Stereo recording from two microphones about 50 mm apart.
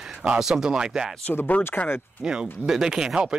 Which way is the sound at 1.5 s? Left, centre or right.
Left.